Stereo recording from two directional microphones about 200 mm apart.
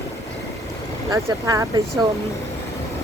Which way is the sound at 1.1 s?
15° right (ahead or behind).